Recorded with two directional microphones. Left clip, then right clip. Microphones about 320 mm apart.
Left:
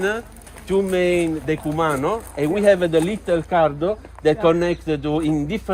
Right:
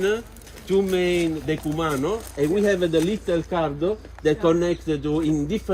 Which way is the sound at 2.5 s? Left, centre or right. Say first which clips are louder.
Left 6 dB; centre.